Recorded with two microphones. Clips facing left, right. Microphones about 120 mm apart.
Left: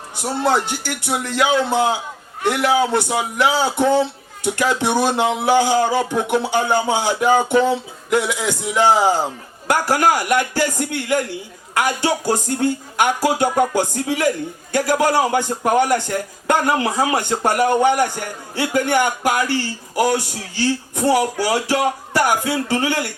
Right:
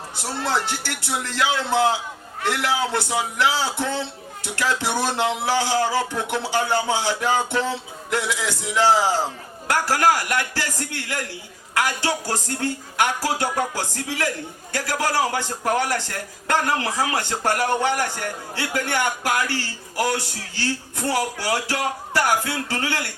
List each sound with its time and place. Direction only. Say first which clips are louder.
0.2 s speech: left 6 dB; 15° left (ahead or behind)